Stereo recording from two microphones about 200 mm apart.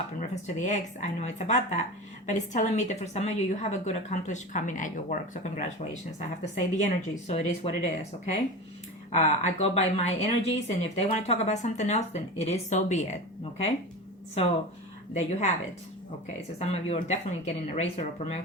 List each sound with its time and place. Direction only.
0.2 s speech: 40° left (ahead or behind)
9.1 s speech: 35° left (ahead or behind)
14.4 s speech: 30° left (ahead or behind)
16.6 s speech: 30° left (ahead or behind)